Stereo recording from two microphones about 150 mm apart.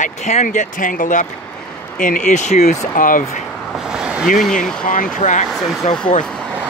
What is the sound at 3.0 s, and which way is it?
Speech, 65° left (ahead or behind).